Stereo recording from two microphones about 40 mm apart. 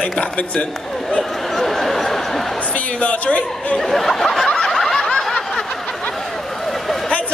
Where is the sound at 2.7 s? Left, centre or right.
Left.